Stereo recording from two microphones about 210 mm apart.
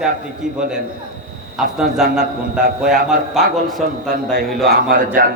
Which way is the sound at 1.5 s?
Centre (ahead or behind).